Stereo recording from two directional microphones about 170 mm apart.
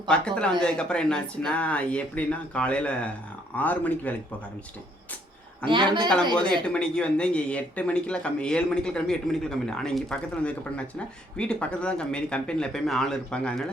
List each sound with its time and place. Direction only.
0.1 s a man's voice: 5° left (ahead or behind)
5.6 s a man's voice: 30° right (ahead or behind)
6.7 s a man's voice: 5° left (ahead or behind)